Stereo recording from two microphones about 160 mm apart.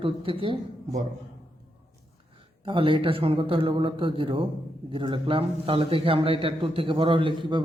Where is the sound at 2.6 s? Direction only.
35° right (ahead or behind).